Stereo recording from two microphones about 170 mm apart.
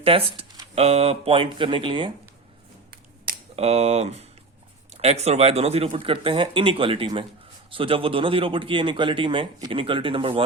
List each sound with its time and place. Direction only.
0.0 s speech: 35° right (ahead or behind)
3.5 s speech: 40° right (ahead or behind)